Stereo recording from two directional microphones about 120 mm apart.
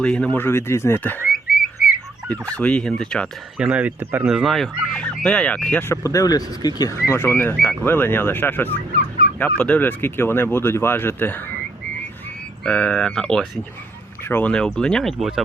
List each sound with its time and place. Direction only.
0.0 s fowl: 5° left (ahead or behind)
0.3 s fowl: 20° left (ahead or behind)
1.3 s frog: centre (ahead or behind)
2.6 s fowl: 10° left (ahead or behind)
3.6 s speech: 10° right (ahead or behind)
4.3 s fowl: 5° right (ahead or behind)
5.8 s speech: 25° left (ahead or behind)
7.1 s fowl: 20° left (ahead or behind)
9.4 s speech: 10° left (ahead or behind)
12.6 s fowl: 10° left (ahead or behind)